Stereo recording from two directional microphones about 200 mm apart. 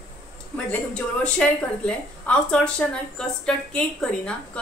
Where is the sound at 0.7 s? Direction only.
5° left (ahead or behind).